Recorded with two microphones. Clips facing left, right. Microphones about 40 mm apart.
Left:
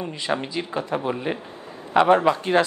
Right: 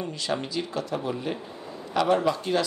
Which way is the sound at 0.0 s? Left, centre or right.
Left.